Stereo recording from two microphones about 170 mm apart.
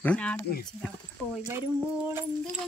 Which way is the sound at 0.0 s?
5° left (ahead or behind).